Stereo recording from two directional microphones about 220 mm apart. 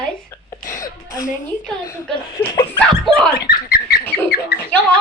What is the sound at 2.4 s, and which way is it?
Speech, 10° left (ahead or behind).